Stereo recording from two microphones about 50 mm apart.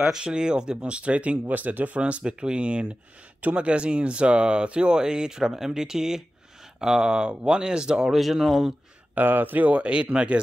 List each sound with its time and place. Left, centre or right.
0.1 s speech: centre
8.2 s speech: centre
9.1 s speech: right